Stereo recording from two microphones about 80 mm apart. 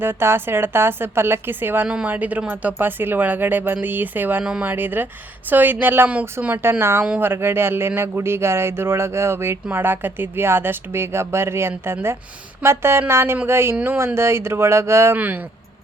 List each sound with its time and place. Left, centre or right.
0.0 s speech: right
1.9 s speech: centre
4.4 s speech: centre
4.7 s speech: right